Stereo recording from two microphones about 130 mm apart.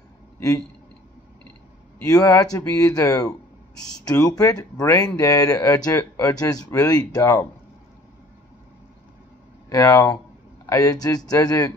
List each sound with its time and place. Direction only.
2.0 s speech: 30° left (ahead or behind)
9.7 s speech: 25° left (ahead or behind)